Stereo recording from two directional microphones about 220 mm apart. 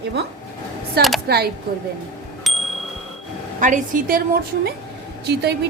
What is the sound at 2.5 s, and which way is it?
Chime, centre (ahead or behind).